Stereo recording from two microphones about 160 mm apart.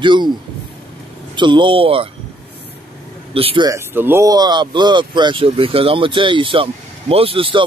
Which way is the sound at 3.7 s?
15° right (ahead or behind).